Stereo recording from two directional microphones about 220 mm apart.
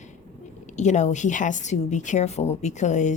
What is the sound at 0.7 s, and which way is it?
A woman's voice, 30° left (ahead or behind).